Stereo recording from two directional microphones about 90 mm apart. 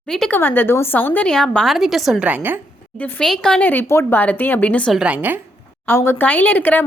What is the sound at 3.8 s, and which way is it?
Speech, 30° left (ahead or behind).